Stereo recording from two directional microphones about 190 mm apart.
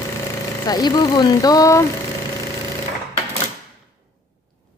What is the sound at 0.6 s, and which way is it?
Speech, 20° left (ahead or behind).